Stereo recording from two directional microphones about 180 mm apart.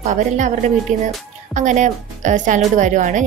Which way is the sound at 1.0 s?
45° right (ahead or behind).